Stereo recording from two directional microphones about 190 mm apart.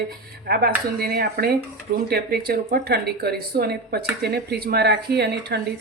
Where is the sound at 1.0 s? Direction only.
55° right (ahead or behind).